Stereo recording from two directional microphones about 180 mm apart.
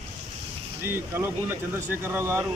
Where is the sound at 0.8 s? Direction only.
15° right (ahead or behind).